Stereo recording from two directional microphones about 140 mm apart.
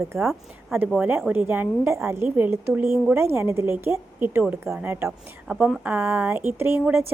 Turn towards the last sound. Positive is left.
turn(degrees=0)  # may be behind; listen again after turning